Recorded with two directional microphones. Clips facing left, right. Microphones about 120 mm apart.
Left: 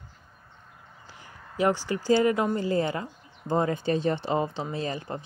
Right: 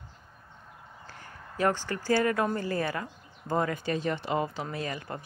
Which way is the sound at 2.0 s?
20° left (ahead or behind).